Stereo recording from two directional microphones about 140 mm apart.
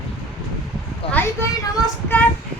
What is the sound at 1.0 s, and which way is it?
Speech, 45° left (ahead or behind).